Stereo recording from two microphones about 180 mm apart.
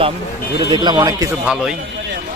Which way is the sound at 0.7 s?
25° right (ahead or behind).